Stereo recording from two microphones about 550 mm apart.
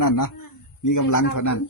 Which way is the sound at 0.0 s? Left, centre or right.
Left.